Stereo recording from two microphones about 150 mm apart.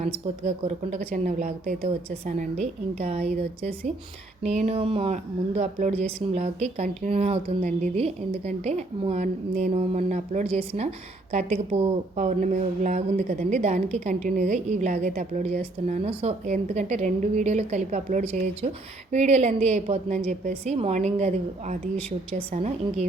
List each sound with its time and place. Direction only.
0.0 s a woman's voice: 45° right (ahead or behind); by 2.1 s 70° right (ahead or behind)
2.4 s a woman's voice: 50° right (ahead or behind)
11.3 s a woman's voice: 55° right (ahead or behind)